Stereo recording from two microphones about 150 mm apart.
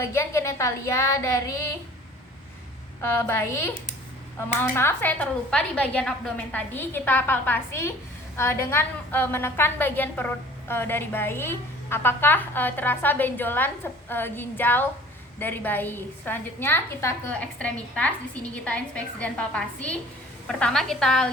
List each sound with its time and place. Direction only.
0.0 s speech: 15° left (ahead or behind)
3.0 s a woman's voice: 15° left (ahead or behind)